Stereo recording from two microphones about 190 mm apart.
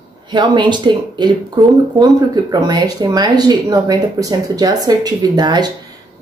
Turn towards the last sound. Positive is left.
turn(degrees=-20)  # may be behind; listen again after turning